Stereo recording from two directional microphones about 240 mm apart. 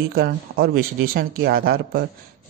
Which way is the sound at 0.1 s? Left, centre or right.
Right.